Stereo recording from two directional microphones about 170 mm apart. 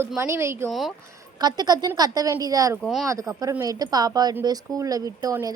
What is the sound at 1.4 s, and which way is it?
Speech, 25° right (ahead or behind).